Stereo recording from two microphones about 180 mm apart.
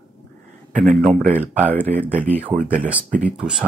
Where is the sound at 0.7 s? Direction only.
45° right (ahead or behind).